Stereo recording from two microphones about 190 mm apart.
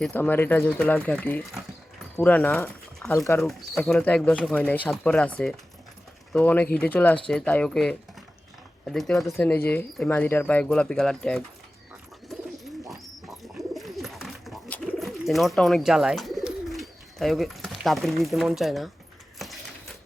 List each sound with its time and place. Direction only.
0.0 s speech: 10° left (ahead or behind)
6.3 s speech: 10° left (ahead or behind)
12.9 s bird: centre (ahead or behind)
19.4 s coin: centre (ahead or behind)